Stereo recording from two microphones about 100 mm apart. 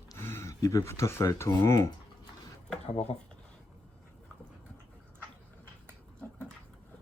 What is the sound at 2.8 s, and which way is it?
Speech, 85° left.